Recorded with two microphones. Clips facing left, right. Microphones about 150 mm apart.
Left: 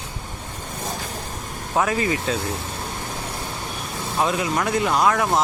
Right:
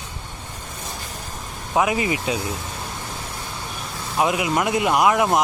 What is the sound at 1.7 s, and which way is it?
Speech, 15° right (ahead or behind).